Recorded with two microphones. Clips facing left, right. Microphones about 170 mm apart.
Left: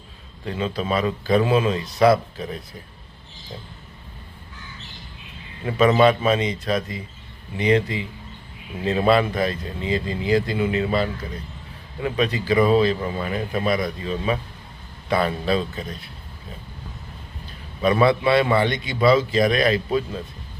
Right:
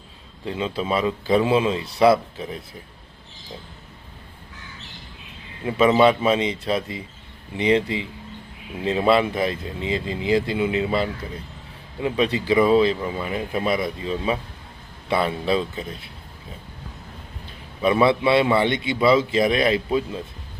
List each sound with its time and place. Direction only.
0.4 s speech: 20° right (ahead or behind)
5.6 s speech: 20° right (ahead or behind)
17.8 s speech: 20° right (ahead or behind)